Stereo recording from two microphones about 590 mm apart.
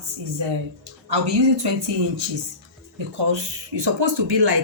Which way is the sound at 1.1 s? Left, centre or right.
Right.